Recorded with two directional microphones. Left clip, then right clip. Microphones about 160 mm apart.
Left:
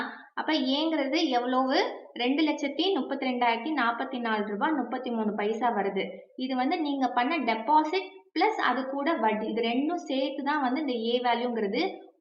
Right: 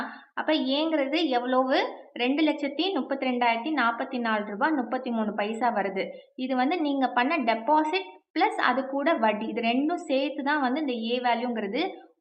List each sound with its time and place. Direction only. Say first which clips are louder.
0.3 s a woman's voice: right 2 dB; 15° right (ahead or behind)